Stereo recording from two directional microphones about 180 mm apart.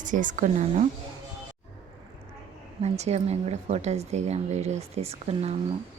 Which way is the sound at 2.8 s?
35° right (ahead or behind).